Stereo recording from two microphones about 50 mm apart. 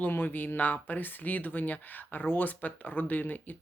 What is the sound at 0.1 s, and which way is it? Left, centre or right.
Speech, left.